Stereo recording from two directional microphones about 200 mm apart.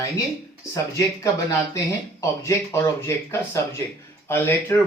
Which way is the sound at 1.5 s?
15° left (ahead or behind).